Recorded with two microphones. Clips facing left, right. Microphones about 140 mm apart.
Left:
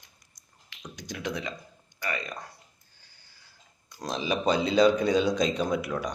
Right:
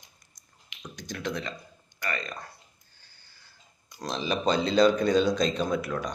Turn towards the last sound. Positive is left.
turn(degrees=10)  # may be behind; listen again after turning